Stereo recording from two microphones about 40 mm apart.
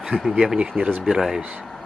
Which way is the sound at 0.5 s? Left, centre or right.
Right.